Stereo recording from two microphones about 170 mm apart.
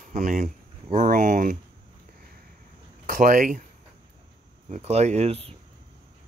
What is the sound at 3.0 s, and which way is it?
Speech, 55° right (ahead or behind).